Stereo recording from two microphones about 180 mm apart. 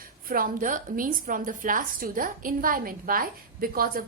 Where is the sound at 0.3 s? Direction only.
50° right (ahead or behind).